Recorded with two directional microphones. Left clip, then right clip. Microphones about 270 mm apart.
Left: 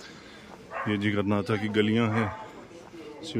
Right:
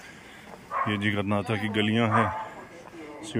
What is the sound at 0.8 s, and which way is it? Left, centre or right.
Speech, centre.